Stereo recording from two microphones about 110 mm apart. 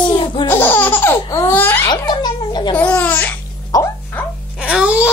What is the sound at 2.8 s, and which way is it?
Laughter, 15° left (ahead or behind).